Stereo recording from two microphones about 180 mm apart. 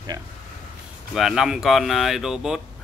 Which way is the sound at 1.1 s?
Centre (ahead or behind).